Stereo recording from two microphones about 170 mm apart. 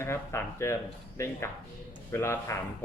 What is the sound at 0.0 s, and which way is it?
Speech, 15° left (ahead or behind).